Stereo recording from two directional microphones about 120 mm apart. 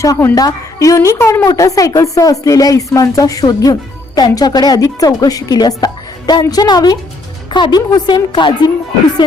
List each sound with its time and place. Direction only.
0.0 s a woman's voice: 25° left (ahead or behind)